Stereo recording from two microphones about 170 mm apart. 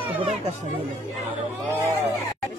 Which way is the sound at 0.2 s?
40° right (ahead or behind).